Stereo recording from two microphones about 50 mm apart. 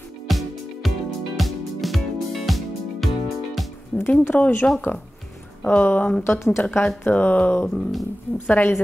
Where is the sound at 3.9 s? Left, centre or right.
Left.